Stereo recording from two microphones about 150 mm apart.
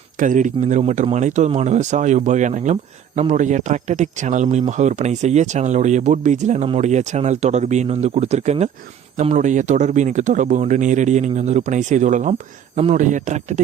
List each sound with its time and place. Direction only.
0.2 s speech: 60° right (ahead or behind)